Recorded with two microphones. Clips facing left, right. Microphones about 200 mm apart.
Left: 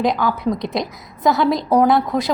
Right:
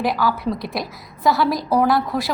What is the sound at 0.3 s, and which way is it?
A woman's voice, 20° left (ahead or behind).